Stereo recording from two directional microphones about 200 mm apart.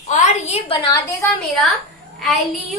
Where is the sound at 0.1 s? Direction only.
35° left (ahead or behind).